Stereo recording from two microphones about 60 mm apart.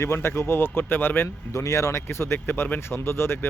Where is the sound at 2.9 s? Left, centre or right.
Left.